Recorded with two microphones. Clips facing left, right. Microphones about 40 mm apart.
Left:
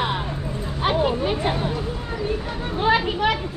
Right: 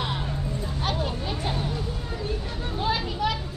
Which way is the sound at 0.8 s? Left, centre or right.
Left.